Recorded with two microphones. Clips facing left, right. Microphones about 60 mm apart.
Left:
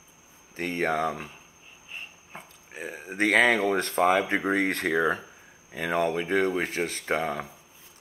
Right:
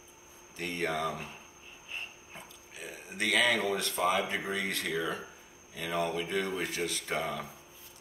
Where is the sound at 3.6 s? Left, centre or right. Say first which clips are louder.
Left 7 dB; left.